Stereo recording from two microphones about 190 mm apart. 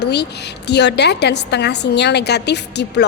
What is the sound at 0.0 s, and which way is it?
A woman's voice, 60° left (ahead or behind).